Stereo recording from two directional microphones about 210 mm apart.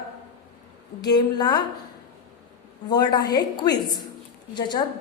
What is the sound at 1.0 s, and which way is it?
Speech, 20° left (ahead or behind).